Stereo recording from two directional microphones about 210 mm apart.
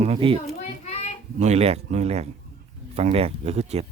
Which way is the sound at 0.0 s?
25° right (ahead or behind).